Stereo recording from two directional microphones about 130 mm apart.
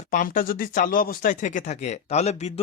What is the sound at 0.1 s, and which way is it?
Speech, 90° left.